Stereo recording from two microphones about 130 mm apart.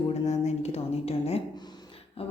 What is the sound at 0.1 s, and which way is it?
Speech, 60° left (ahead or behind).